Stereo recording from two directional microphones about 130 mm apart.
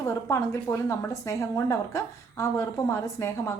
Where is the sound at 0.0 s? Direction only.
25° left (ahead or behind).